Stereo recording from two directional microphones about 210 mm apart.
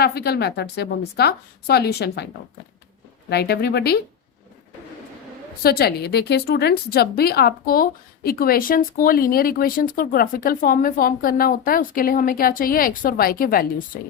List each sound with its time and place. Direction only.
0.0 s a woman's voice: 50° left (ahead or behind)
3.2 s a woman's voice: 50° left (ahead or behind)
5.6 s a woman's voice: 45° left (ahead or behind)